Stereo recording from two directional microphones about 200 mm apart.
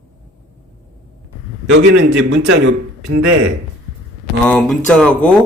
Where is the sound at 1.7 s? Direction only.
70° right (ahead or behind).